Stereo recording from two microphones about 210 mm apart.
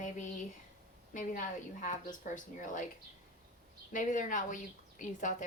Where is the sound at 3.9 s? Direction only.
35° left (ahead or behind).